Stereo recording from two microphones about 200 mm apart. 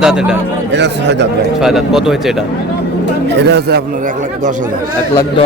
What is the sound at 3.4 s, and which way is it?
Speech, 55° right (ahead or behind).